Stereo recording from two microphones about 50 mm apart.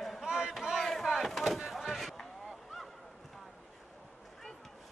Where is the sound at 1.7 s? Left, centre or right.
Centre.